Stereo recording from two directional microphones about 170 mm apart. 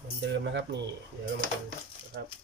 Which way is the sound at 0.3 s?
90° right.